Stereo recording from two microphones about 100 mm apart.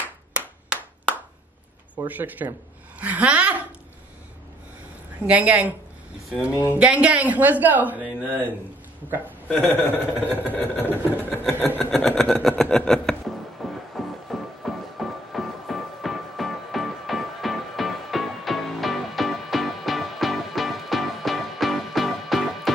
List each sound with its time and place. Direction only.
0.3 s clapping: 15° right (ahead or behind)
2.0 s a woman's voice: 20° right (ahead or behind)
5.2 s speech: 15° right (ahead or behind)
9.5 s vehicle: 15° left (ahead or behind)
11.8 s a sound: 5° left (ahead or behind)
13.6 s music: centre (ahead or behind)